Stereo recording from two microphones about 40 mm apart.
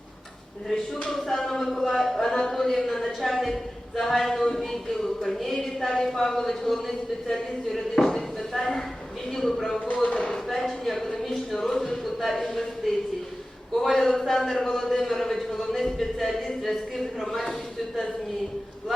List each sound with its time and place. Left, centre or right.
1.1 s a sound: centre
3.9 s speech: centre
9.8 s speech: left
10.5 s speech: centre
11.2 s a sound: centre
11.6 s speech: centre